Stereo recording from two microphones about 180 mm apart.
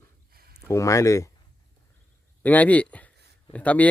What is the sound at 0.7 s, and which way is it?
Speech, 15° left (ahead or behind).